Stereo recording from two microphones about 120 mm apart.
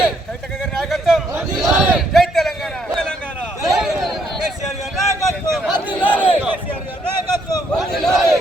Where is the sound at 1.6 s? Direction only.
5° right (ahead or behind).